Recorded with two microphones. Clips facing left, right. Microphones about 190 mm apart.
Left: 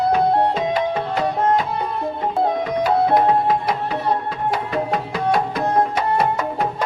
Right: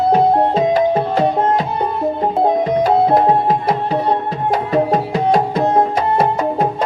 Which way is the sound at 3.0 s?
30° right (ahead or behind).